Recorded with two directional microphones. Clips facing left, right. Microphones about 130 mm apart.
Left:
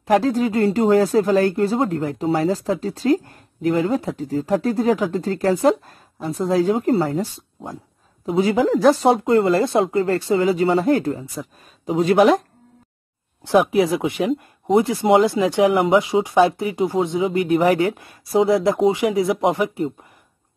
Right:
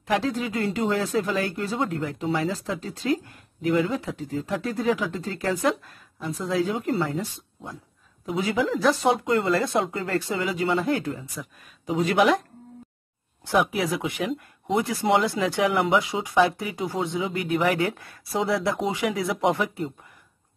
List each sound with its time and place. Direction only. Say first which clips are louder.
0.0 s speech: left 8 dB; 40° left (ahead or behind)
13.5 s speech: left 7 dB; 25° left (ahead or behind)
18.3 s speech: left 8 dB; 25° left (ahead or behind)